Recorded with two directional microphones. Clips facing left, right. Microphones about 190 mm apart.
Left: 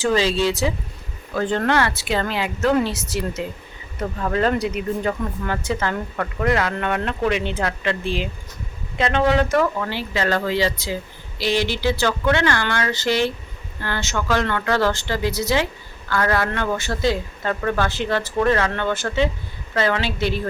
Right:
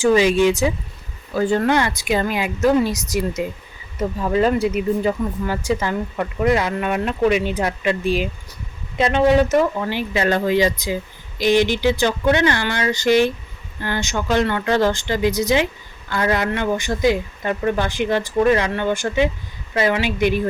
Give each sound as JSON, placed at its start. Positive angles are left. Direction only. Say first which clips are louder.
{"t": 0.0, "sound": "a woman's voice", "louder": "right 5 dB", "side_deg": -15}